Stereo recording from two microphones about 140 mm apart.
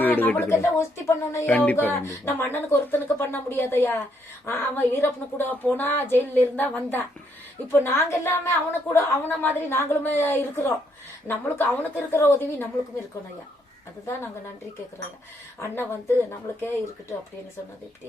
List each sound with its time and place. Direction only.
0.0 s speech: 15° left (ahead or behind)
15.6 s speech: 15° left (ahead or behind)